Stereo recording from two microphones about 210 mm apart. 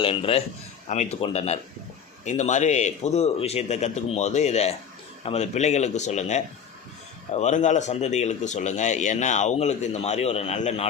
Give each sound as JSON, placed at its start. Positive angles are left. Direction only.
{"t": 0.0, "sound": "a man's voice", "side_deg": 25}